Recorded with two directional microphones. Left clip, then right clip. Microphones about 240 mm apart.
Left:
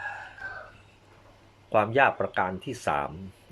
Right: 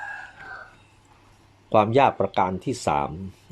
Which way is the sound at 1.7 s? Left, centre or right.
Right.